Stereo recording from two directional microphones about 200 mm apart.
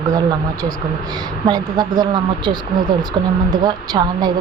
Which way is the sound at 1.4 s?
20° right (ahead or behind).